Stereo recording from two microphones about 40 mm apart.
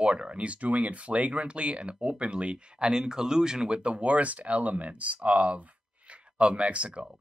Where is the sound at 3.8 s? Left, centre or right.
Right.